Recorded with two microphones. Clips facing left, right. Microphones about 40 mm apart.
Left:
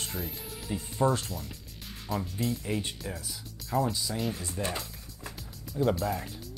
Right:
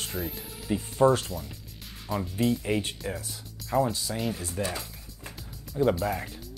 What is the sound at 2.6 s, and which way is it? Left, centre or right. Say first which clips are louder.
Speech: right 4 dB; right.